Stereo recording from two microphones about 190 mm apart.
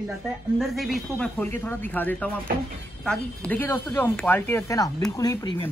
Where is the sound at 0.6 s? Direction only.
Centre (ahead or behind).